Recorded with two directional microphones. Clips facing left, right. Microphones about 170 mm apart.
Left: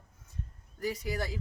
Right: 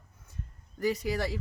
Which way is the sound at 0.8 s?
70° right (ahead or behind).